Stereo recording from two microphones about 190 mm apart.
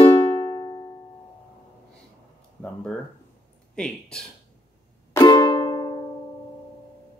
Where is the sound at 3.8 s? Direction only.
5° left (ahead or behind).